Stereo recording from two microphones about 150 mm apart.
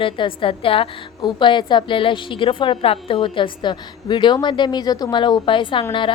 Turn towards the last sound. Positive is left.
turn(degrees=35)  # may be behind; listen again after turning